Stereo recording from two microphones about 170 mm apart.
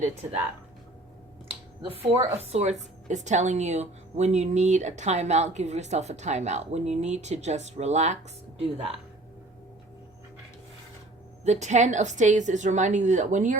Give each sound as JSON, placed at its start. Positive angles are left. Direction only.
{"t": 0.0, "sound": "a woman's voice", "side_deg": -35}
{"t": 1.8, "sound": "a woman's voice", "side_deg": -35}
{"t": 11.4, "sound": "a woman's voice", "side_deg": -45}